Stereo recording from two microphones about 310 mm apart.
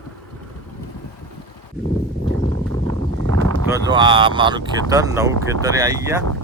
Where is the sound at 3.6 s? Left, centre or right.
Centre.